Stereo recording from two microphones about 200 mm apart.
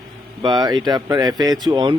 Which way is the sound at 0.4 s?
20° right (ahead or behind).